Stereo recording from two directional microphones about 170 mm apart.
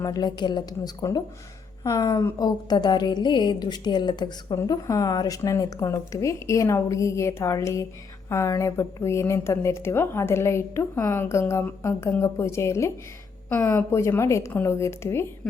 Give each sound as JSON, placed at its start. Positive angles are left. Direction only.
{"t": 0.0, "sound": "a woman's voice", "side_deg": 20}